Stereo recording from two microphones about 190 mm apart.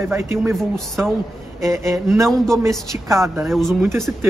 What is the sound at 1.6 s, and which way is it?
A man's voice, 15° right (ahead or behind).